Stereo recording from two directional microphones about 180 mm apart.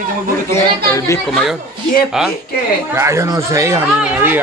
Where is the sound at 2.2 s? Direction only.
Centre (ahead or behind).